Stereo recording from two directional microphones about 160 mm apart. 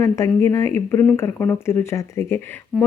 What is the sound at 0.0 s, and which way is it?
Speech, 15° left (ahead or behind).